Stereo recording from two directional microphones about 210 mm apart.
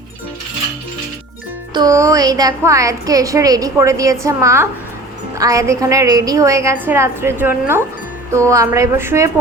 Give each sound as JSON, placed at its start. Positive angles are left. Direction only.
{"t": 1.7, "sound": "a woman's voice", "side_deg": -15}